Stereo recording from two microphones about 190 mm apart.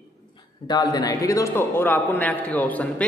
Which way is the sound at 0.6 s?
20° left (ahead or behind).